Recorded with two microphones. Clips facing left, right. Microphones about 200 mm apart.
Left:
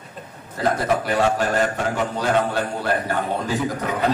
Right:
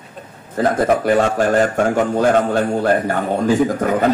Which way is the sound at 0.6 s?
50° right (ahead or behind).